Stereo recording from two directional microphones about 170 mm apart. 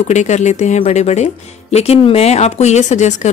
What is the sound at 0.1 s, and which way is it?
Speech, 45° left (ahead or behind).